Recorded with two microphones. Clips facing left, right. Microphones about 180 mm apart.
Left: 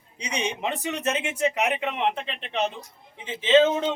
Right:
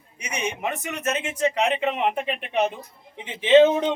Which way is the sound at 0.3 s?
15° left (ahead or behind).